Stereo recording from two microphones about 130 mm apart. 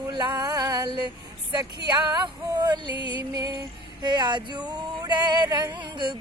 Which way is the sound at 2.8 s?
40° left (ahead or behind).